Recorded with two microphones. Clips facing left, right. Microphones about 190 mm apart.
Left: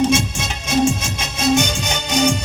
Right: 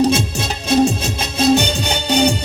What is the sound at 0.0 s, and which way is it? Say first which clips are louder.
Music: right 2 dB; 35° right (ahead or behind).